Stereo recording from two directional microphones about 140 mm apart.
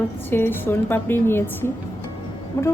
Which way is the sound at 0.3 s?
15° left (ahead or behind).